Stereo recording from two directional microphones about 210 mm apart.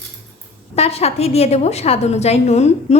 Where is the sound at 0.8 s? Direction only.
30° left (ahead or behind).